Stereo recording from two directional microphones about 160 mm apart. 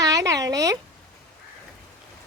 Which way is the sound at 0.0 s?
20° right (ahead or behind).